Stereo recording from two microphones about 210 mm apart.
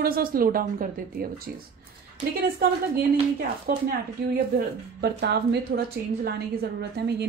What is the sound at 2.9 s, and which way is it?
Speech, 45° right (ahead or behind).